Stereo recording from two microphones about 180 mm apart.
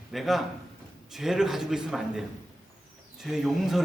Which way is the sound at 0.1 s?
Centre (ahead or behind).